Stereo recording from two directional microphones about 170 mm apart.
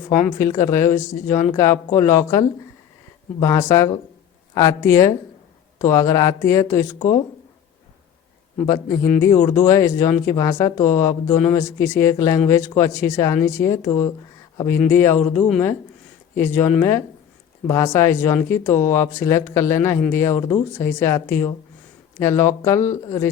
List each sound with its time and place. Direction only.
0.3 s speech: 15° left (ahead or behind)
8.5 s speech: 20° left (ahead or behind); by 15.6 s 5° left (ahead or behind)
16.3 s speech: 15° left (ahead or behind)
17.7 s speech: 15° left (ahead or behind)